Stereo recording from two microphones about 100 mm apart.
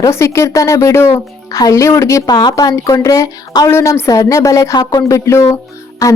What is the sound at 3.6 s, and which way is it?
A woman's voice, 25° left (ahead or behind).